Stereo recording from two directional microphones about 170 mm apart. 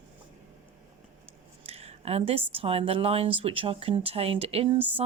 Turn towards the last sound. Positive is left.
turn(degrees=-35)  # may be behind; listen again after turning